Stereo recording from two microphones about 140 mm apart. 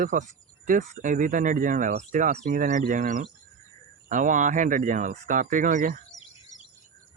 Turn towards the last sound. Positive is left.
turn(degrees=-25)  # may be behind; listen again after turning